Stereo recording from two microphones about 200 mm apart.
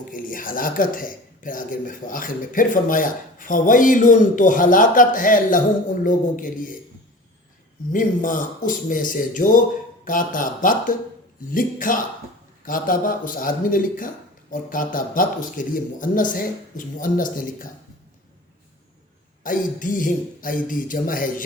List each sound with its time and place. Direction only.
0.1 s speech: 45° left (ahead or behind)
7.9 s speech: 40° left (ahead or behind)
19.4 s speech: 40° left (ahead or behind)